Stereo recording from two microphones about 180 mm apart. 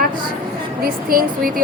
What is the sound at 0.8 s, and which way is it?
Speech, 55° right (ahead or behind).